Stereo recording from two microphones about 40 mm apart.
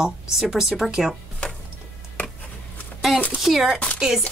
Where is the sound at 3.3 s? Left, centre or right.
Centre.